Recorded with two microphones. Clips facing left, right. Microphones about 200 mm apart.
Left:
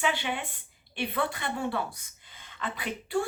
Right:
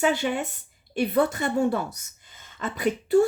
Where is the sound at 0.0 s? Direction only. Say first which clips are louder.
Right 7 dB; 40° right (ahead or behind).